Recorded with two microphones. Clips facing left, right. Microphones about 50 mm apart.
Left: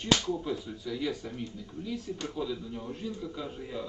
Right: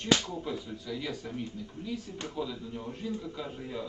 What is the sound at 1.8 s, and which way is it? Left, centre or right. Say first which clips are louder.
Speech: left 2 dB; right.